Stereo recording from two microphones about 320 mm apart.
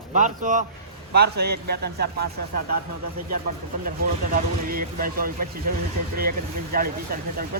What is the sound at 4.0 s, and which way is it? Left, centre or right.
Speech, right.